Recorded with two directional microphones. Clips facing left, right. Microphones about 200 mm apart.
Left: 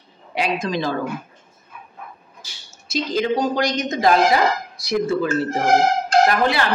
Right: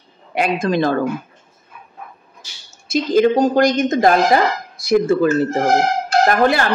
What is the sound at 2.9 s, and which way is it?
Speech, 50° right (ahead or behind).